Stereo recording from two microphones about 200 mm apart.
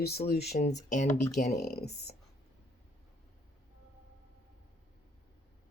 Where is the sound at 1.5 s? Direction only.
50° left (ahead or behind).